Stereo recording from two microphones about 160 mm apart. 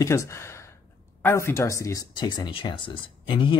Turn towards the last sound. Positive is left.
turn(degrees=30)  # may be behind; listen again after turning